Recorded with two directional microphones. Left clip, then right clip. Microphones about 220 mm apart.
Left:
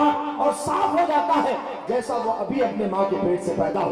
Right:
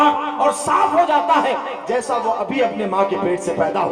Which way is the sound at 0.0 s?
15° right (ahead or behind).